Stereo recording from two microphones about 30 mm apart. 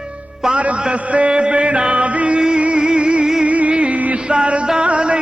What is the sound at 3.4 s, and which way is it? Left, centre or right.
Music, right.